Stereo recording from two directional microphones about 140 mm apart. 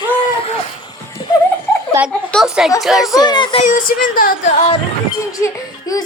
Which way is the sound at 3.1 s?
30° left (ahead or behind).